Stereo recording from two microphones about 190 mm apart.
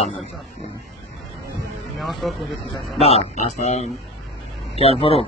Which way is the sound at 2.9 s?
35° left (ahead or behind).